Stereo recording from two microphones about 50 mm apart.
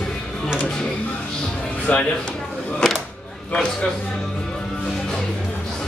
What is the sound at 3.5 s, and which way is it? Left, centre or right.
Speech, centre.